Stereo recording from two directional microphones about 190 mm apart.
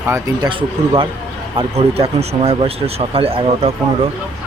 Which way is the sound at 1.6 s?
30° right (ahead or behind).